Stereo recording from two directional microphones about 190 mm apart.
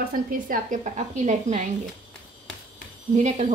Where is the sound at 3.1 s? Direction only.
35° right (ahead or behind).